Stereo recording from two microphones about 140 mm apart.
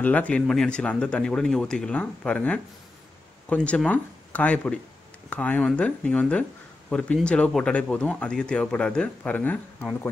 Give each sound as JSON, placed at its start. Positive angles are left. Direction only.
{"t": 0.0, "sound": "speech", "side_deg": 10}